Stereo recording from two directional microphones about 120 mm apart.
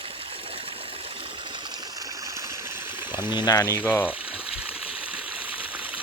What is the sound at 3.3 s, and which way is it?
Speech, 35° left (ahead or behind).